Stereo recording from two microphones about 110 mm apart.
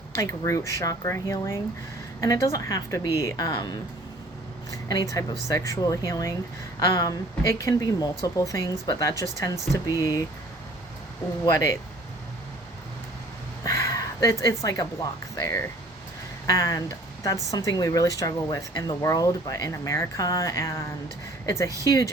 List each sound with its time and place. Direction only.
0.2 s speech: 25° left (ahead or behind)
4.9 s speech: 35° left (ahead or behind)
11.4 s speech: 25° left (ahead or behind)
13.7 s speech: 30° left (ahead or behind)